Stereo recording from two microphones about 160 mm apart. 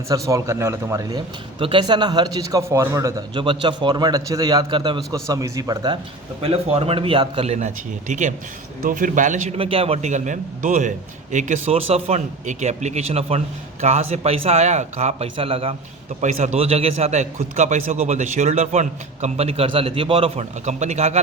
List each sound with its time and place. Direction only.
0.1 s a man's voice: 20° right (ahead or behind)
1.5 s a man's voice: 30° right (ahead or behind)
6.4 s a man's voice: 40° right (ahead or behind)
9.6 s a man's voice: 35° right (ahead or behind)
16.2 s a man's voice: 45° right (ahead or behind)